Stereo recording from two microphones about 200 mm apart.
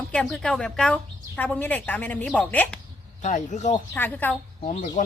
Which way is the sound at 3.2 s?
40° left (ahead or behind).